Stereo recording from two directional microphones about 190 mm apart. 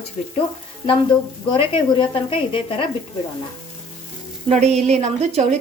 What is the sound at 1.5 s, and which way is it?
Speech, 25° left (ahead or behind).